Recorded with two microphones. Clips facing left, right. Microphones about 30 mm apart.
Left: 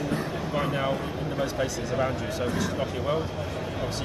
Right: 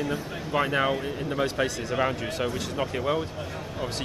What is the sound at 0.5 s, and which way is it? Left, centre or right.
Speech, right.